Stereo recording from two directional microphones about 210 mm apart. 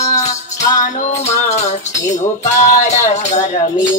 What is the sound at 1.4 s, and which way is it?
Music, 35° left (ahead or behind).